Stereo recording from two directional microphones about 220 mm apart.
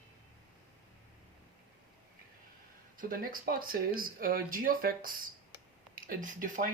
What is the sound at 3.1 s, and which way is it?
Speech, 40° right (ahead or behind).